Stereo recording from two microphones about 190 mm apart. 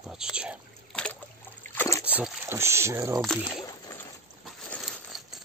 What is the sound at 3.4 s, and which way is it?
Rowboat, 20° left (ahead or behind).